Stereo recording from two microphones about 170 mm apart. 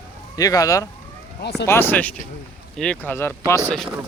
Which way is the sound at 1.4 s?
80° left.